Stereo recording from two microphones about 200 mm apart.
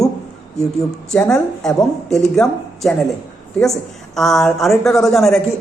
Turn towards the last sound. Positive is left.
turn(degrees=0)  # may be behind; listen again after turning